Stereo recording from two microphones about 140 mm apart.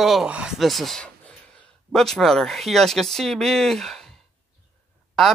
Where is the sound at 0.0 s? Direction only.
5° right (ahead or behind).